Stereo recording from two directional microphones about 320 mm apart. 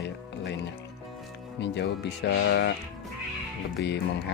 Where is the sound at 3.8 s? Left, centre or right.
Left.